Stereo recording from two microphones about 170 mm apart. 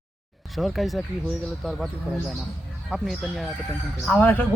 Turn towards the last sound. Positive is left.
turn(degrees=10)  # may be behind; listen again after turning